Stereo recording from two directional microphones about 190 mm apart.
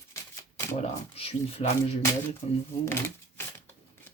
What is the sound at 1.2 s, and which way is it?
Speech, 30° left (ahead or behind).